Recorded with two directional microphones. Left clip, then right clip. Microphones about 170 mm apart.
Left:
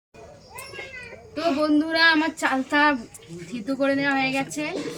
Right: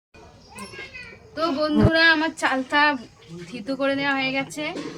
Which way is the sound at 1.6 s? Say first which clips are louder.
Right 2 dB; 45° right (ahead or behind).